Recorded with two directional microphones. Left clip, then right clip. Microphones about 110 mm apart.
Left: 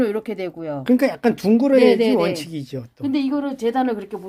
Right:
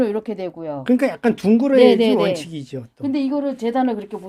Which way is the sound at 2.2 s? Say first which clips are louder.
Right 1 dB; 15° right (ahead or behind).